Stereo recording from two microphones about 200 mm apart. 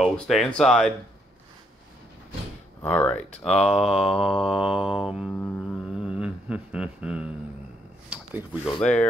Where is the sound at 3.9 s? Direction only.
30° left (ahead or behind).